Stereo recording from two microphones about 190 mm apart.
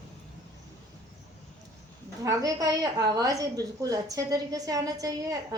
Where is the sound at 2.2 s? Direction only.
15° right (ahead or behind).